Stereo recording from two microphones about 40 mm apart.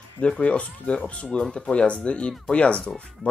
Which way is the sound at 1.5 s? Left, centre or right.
Left.